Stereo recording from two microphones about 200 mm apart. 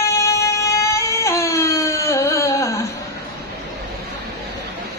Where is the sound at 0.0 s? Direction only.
15° left (ahead or behind).